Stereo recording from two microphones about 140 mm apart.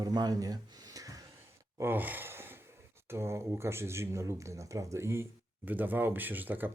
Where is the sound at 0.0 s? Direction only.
30° right (ahead or behind).